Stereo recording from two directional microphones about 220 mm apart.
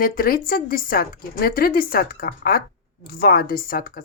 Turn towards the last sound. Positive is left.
turn(degrees=40)  # may be behind; listen again after turning